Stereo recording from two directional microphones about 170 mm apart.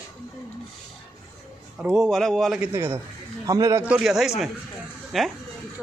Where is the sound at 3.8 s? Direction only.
5° right (ahead or behind).